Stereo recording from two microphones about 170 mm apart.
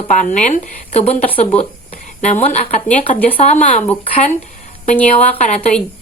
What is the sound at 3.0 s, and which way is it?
Speech, 10° left (ahead or behind).